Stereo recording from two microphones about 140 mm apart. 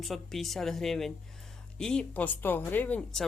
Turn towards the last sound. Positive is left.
turn(degrees=10)  # may be behind; listen again after turning